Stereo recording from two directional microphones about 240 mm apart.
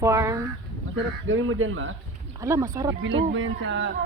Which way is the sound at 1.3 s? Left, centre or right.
Right.